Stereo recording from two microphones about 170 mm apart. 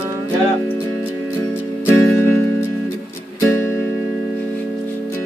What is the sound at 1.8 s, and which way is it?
Music, 10° left (ahead or behind).